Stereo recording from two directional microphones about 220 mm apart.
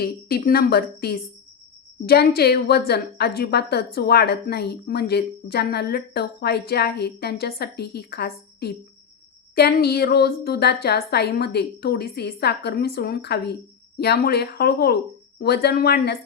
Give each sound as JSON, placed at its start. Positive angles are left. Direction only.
{"t": 0.0, "sound": "a woman's voice", "side_deg": 45}